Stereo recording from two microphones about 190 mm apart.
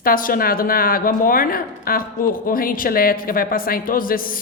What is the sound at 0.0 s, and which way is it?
A man's voice, 45° left (ahead or behind).